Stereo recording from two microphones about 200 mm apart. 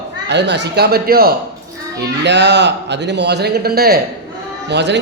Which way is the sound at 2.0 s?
60° right (ahead or behind).